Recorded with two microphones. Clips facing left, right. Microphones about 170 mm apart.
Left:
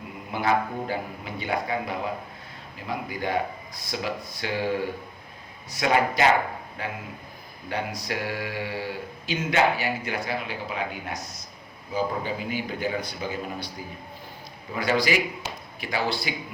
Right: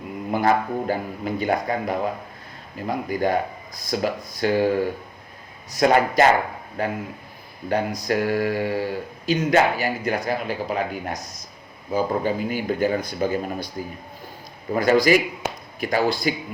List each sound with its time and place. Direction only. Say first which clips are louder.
0.3 s speech: right 4 dB; 45° right (ahead or behind)
14.7 s speech: right 7 dB; 45° right (ahead or behind)